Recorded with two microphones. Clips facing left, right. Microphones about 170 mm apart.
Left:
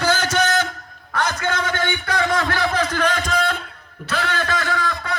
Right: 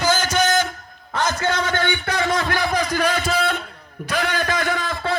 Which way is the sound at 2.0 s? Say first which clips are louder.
Left 1 dB; 20° right (ahead or behind).